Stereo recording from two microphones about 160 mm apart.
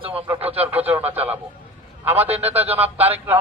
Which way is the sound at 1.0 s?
40° right (ahead or behind).